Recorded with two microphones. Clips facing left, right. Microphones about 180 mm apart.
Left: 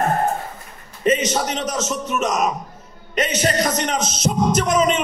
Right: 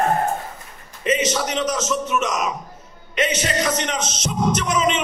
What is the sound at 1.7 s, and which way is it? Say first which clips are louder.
Speech: right 1 dB; 40° left (ahead or behind).